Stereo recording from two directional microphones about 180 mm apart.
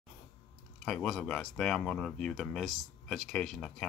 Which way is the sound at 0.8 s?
5° left (ahead or behind).